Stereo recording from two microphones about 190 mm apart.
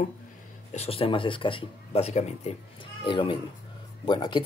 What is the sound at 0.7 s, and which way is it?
Speech, 30° left (ahead or behind).